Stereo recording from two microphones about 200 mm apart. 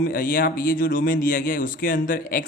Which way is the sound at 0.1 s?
45° left (ahead or behind).